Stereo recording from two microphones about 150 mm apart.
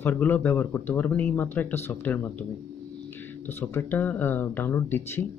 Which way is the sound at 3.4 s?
15° left (ahead or behind).